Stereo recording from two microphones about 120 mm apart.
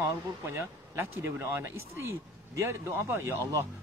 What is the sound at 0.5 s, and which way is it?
Speech, 20° right (ahead or behind).